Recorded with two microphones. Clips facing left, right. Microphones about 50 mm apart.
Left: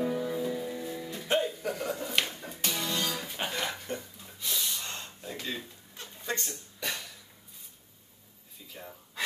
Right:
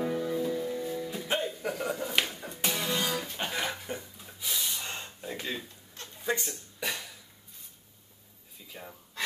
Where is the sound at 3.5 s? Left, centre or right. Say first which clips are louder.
Left 1 dB; centre.